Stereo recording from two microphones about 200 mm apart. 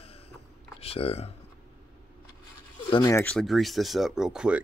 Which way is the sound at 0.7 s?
30° left (ahead or behind).